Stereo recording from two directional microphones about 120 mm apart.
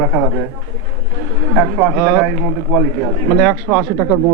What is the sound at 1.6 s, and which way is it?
Speech, 10° right (ahead or behind).